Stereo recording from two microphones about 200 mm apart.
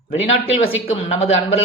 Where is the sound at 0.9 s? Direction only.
35° left (ahead or behind).